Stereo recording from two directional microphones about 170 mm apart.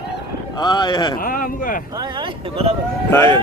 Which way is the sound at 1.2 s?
55° left (ahead or behind).